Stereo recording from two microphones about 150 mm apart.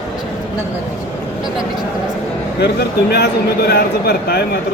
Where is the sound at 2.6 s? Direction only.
90° left.